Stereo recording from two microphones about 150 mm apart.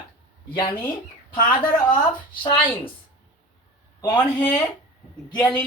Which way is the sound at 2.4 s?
35° left (ahead or behind).